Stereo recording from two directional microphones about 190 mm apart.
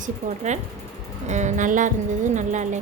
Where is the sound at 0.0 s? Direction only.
40° right (ahead or behind).